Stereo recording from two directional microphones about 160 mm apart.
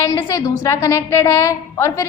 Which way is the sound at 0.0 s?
20° left (ahead or behind).